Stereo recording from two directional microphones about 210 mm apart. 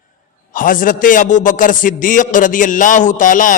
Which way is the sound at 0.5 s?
40° left (ahead or behind).